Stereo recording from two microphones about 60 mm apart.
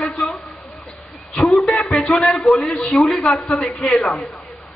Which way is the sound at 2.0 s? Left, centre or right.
Centre.